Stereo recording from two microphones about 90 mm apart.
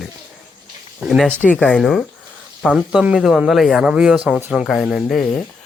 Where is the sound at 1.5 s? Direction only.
10° left (ahead or behind).